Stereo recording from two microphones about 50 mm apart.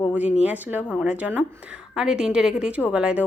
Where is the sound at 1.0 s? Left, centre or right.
Right.